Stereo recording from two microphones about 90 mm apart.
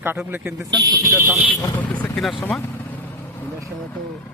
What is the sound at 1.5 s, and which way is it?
Speech, 20° left (ahead or behind).